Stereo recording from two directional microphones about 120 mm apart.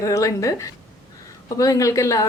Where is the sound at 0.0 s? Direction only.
25° left (ahead or behind).